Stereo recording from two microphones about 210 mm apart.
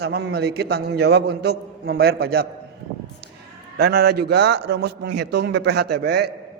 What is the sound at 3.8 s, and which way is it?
A man's voice, 50° right (ahead or behind).